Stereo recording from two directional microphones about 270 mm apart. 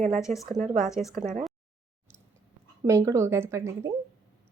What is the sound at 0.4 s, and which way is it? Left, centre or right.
Speech, right.